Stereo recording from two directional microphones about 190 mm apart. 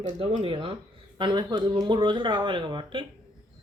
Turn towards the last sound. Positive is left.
turn(degrees=-25)  # may be behind; listen again after turning